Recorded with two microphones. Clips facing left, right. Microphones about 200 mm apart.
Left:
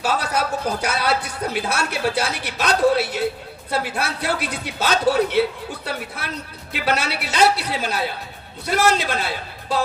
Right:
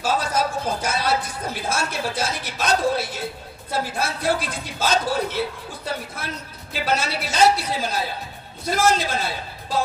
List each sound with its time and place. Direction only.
0.0 s a man's voice: 65° left (ahead or behind)
6.7 s a man's voice: 65° left (ahead or behind)